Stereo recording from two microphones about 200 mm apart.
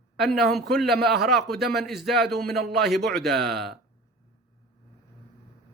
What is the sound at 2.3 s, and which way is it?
Speech, 55° right (ahead or behind).